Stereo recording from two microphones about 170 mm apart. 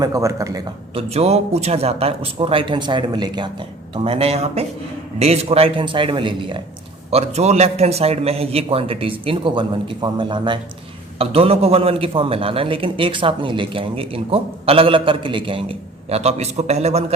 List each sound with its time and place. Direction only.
0.0 s a man's voice: 20° right (ahead or behind)
0.9 s a man's voice: 40° right (ahead or behind)